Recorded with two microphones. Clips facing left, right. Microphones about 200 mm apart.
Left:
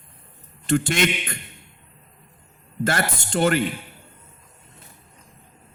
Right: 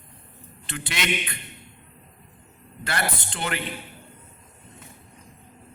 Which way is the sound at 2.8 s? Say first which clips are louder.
Left 5 dB; 45° left (ahead or behind).